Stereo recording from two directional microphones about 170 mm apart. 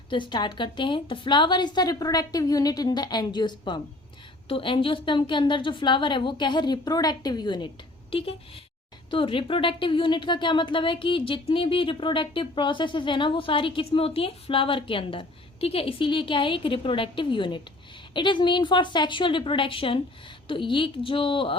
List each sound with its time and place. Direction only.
0.1 s speech: 25° left (ahead or behind)